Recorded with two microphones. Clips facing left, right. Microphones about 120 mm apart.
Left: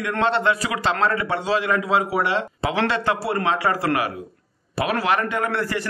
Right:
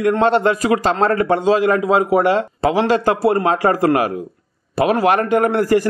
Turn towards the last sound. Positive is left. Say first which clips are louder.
# right 9 dB
turn(degrees=-45)  # may be behind; listen again after turning